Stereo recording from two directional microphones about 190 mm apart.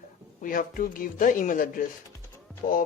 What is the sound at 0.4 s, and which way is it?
Speech, 45° left (ahead or behind).